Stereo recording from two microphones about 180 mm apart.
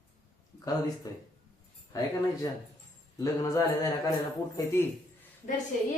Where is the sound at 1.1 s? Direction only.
20° left (ahead or behind).